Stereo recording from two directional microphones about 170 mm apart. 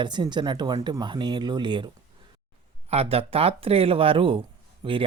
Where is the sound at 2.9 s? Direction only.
35° right (ahead or behind).